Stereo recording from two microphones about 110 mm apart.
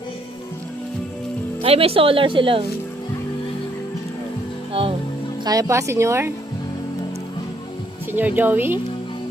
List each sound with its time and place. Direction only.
1.6 s speech: 60° right (ahead or behind)
4.7 s music: 60° right (ahead or behind)
5.5 s a woman's voice: 30° right (ahead or behind)
8.4 s a woman's voice: 20° right (ahead or behind)